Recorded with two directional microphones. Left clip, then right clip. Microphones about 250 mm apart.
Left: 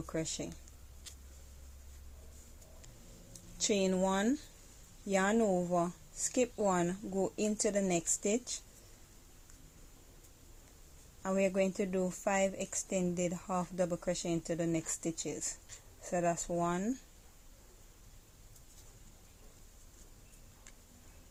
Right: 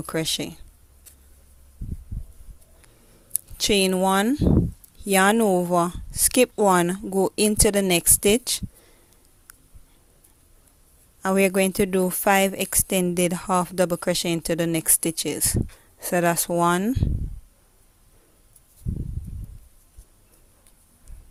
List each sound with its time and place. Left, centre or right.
0.0 s a woman's voice: right
3.3 s a woman's voice: right
11.2 s a woman's voice: right